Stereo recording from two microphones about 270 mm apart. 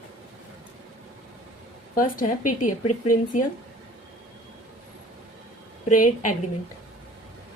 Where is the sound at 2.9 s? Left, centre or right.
Left.